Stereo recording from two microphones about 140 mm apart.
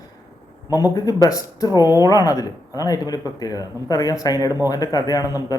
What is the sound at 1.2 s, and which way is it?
A man's voice, 25° left (ahead or behind).